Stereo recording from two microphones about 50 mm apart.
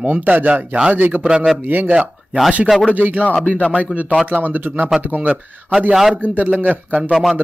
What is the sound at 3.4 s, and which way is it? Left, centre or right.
Speech, left.